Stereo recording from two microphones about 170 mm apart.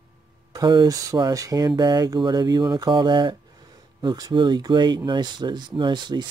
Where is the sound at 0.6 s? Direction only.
25° right (ahead or behind).